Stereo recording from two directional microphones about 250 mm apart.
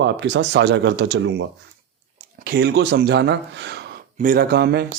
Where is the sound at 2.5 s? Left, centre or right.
Right.